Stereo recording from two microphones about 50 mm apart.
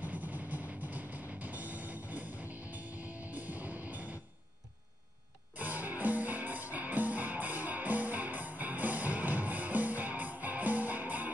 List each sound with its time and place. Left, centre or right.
0.0 s music: right
5.6 s music: right